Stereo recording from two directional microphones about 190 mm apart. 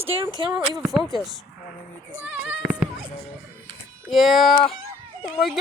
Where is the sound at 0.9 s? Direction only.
Centre (ahead or behind).